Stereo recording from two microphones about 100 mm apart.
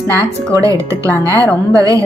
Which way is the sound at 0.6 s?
30° right (ahead or behind).